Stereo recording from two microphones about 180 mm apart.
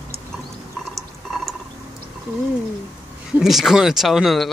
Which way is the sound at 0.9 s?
Centre (ahead or behind).